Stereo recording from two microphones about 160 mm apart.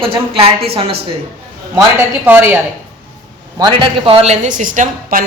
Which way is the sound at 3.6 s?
30° right (ahead or behind).